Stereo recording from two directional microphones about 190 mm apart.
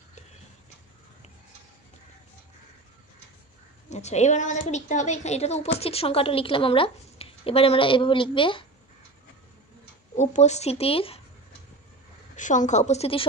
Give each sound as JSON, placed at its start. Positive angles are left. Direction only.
{"t": 3.9, "sound": "a woman's voice", "side_deg": 35}
{"t": 10.1, "sound": "a woman's voice", "side_deg": 35}
{"t": 12.4, "sound": "a woman's voice", "side_deg": 40}